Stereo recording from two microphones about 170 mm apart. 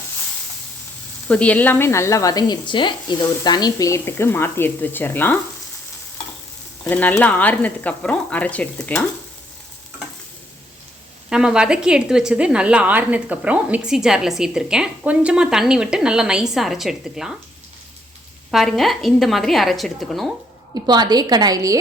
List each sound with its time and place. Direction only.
1.3 s speech: 5° left (ahead or behind)
6.8 s speech: 10° left (ahead or behind)
11.3 s a woman's voice: 5° right (ahead or behind)
18.5 s a woman's voice: centre (ahead or behind)
20.7 s a woman's voice: 25° right (ahead or behind)